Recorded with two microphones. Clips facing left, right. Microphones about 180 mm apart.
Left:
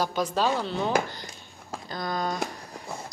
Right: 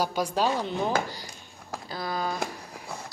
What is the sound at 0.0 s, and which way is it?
Speech, 10° right (ahead or behind).